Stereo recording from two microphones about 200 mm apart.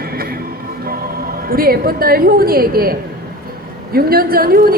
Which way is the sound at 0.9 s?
45° right (ahead or behind).